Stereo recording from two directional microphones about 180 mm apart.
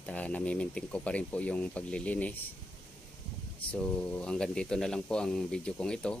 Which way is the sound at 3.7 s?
5° left (ahead or behind).